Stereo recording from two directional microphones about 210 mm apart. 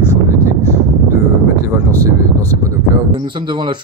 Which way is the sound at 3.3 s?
20° right (ahead or behind).